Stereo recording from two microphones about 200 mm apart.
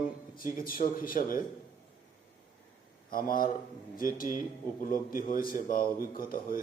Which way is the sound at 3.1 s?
45° left (ahead or behind).